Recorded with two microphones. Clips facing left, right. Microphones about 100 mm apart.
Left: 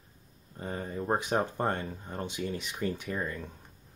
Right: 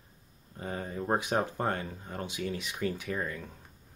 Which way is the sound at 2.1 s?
20° left (ahead or behind).